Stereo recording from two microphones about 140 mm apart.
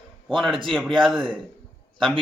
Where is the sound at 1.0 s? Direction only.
Centre (ahead or behind).